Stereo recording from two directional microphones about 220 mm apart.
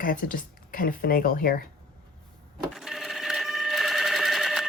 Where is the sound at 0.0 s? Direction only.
40° left (ahead or behind).